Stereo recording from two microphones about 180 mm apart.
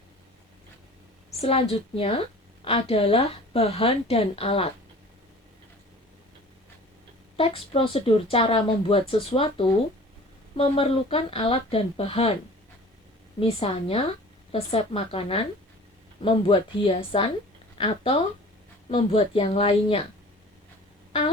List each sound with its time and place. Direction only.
1.4 s speech: 35° left (ahead or behind)
7.3 s speech: 30° left (ahead or behind)
13.4 s speech: 30° left (ahead or behind)